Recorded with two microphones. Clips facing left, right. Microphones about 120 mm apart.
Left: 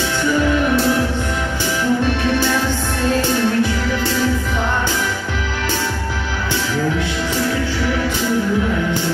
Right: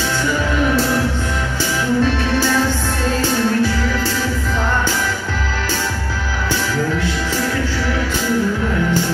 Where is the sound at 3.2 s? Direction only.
20° left (ahead or behind).